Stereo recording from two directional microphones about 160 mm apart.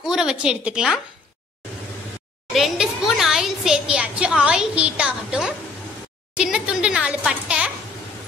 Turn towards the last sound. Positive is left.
turn(degrees=-5)  # may be behind; listen again after turning